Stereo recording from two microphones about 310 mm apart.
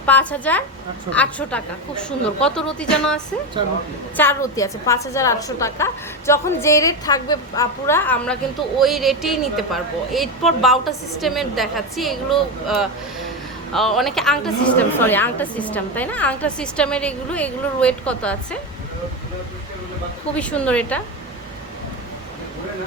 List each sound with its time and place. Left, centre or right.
0.0 s a woman's voice: centre
4.2 s a woman's voice: centre
20.3 s a woman's voice: centre